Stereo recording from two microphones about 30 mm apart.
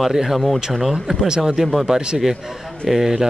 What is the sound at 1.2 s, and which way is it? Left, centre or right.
Speech, right.